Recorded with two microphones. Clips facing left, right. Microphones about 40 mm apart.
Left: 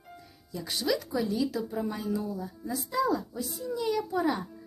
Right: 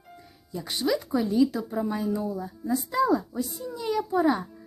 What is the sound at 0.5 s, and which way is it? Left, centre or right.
Speech, right.